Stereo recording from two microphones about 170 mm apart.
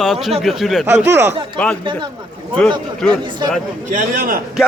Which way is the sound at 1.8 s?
30° right (ahead or behind).